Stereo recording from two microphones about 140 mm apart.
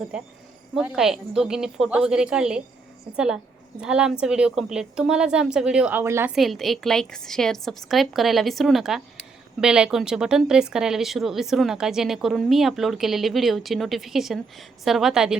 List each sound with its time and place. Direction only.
0.1 s a woman's voice: 5° right (ahead or behind)
6.3 s speech: centre (ahead or behind)